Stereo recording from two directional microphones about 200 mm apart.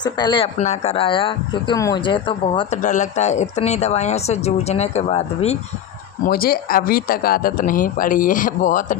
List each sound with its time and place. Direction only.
0.0 s speech: 20° left (ahead or behind)
2.8 s speech: 35° left (ahead or behind)
6.2 s speech: 50° left (ahead or behind)